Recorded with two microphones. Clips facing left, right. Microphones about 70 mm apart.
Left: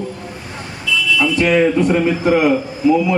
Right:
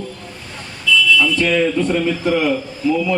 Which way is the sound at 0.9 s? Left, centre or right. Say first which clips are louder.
Right 2 dB; left.